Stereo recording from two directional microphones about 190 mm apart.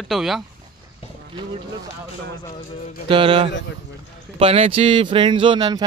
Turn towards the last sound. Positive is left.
turn(degrees=-20)  # may be behind; listen again after turning